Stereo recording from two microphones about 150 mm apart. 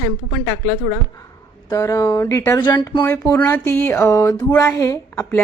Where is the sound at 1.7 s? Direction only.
20° left (ahead or behind).